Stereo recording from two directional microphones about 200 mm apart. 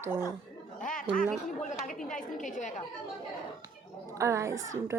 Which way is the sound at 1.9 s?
40° left (ahead or behind).